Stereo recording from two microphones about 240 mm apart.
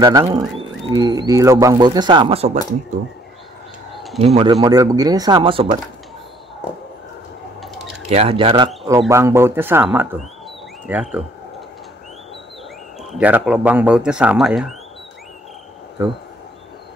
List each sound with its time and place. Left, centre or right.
0.0 s speech: centre
3.9 s bird: centre
4.2 s speech: right
7.6 s a sound: centre
8.1 s speech: right
9.1 s speech: centre
13.0 s speech: centre